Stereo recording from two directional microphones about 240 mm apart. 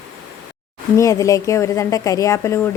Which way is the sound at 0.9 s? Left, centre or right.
Centre.